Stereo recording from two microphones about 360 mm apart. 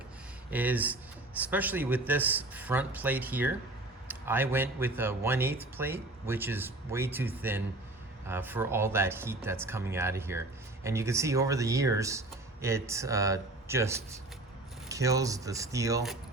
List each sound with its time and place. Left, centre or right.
0.5 s speech: centre